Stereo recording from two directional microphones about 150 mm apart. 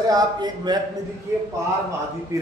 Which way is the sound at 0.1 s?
30° right (ahead or behind).